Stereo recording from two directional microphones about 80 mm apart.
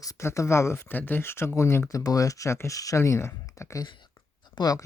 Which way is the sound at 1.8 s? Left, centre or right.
Left.